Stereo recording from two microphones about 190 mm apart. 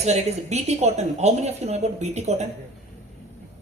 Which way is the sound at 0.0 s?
35° right (ahead or behind).